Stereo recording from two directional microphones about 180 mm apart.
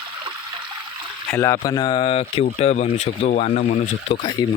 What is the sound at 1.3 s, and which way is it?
Speech, 15° left (ahead or behind).